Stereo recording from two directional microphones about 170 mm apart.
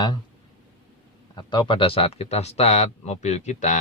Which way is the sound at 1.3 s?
25° left (ahead or behind).